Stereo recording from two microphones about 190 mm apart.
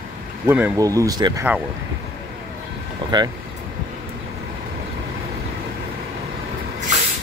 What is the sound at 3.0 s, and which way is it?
Vehicle, 25° right (ahead or behind).